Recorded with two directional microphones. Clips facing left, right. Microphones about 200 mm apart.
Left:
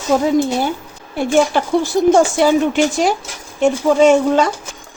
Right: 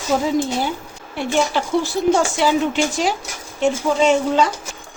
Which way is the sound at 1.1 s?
45° left (ahead or behind).